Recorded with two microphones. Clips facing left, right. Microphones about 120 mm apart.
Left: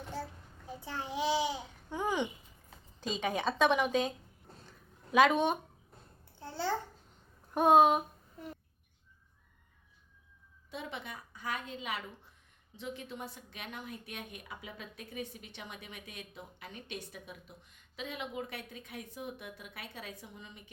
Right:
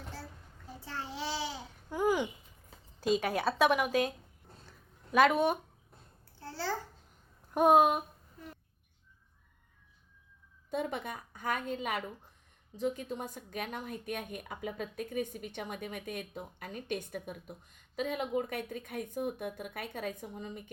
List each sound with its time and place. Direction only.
0.8 s babbling: 15° left (ahead or behind)
1.9 s babbling: 5° right (ahead or behind)
3.0 s a woman's voice: 5° right (ahead or behind)
6.4 s babbling: 20° left (ahead or behind)
7.5 s speech: 10° right (ahead or behind)
10.7 s a woman's voice: 50° right (ahead or behind)